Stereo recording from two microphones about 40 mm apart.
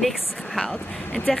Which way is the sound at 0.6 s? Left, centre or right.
Left.